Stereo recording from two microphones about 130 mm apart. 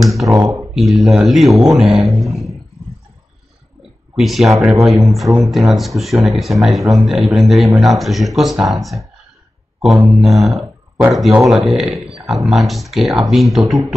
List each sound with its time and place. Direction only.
0.0 s speech: centre (ahead or behind)
0.3 s speech: 20° right (ahead or behind)
0.7 s speech: centre (ahead or behind)
4.2 s speech: centre (ahead or behind)